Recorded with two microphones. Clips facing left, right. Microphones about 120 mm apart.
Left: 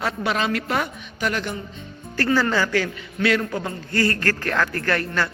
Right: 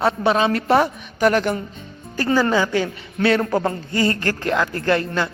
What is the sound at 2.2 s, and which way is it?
A woman's voice, 15° right (ahead or behind).